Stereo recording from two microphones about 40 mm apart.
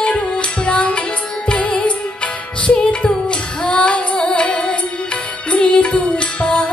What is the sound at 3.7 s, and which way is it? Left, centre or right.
Music, left.